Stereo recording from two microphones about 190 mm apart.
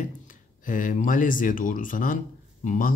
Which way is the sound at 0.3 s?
45° left (ahead or behind).